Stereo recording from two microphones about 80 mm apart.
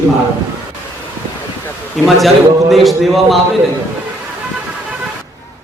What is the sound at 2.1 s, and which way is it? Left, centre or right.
A man's voice, centre.